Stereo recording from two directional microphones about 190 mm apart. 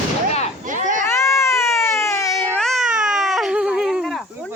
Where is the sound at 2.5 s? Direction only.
Centre (ahead or behind).